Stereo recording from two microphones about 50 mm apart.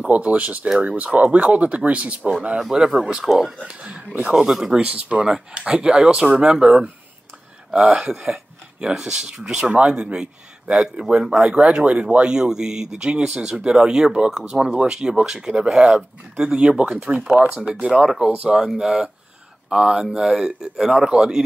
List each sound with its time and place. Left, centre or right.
0.1 s speech: right
2.7 s speech: centre
4.8 s speech: right
17.5 s speech: centre